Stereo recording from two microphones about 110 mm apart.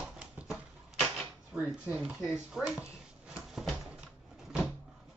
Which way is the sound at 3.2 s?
5° right (ahead or behind).